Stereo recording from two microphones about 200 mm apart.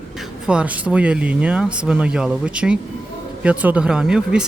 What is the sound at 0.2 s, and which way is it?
Speech, 5° right (ahead or behind).